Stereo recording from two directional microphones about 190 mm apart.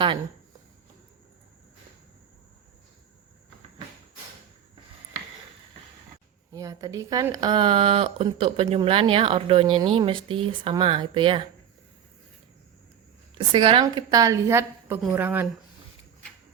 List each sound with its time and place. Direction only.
6.5 s speech: 20° right (ahead or behind)
13.5 s speech: 25° right (ahead or behind); by 15.4 s 10° right (ahead or behind)